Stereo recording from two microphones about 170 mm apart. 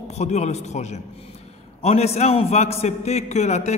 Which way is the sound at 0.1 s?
40° left (ahead or behind).